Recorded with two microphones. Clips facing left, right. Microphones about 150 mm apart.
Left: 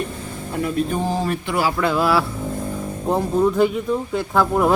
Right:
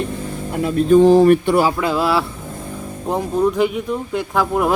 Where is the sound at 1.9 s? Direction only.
25° right (ahead or behind).